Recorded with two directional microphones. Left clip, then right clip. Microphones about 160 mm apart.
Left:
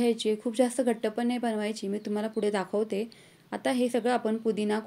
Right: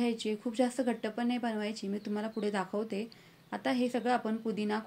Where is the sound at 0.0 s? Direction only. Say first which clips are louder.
Left 7 dB; 35° left (ahead or behind).